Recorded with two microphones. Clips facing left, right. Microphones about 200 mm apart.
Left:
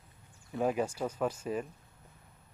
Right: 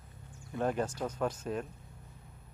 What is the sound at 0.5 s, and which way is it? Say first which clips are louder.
Speech: left 2 dB; 5° left (ahead or behind).